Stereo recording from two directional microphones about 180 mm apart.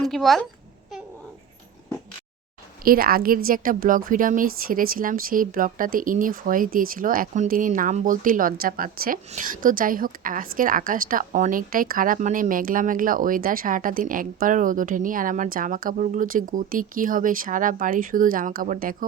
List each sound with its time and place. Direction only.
0.0 s a child's voice: centre (ahead or behind)
2.8 s a woman's voice: 55° right (ahead or behind)